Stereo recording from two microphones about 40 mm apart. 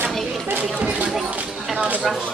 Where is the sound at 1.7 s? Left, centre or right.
Right.